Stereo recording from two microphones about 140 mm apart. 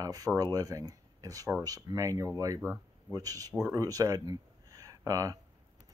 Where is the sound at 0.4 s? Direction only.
25° right (ahead or behind).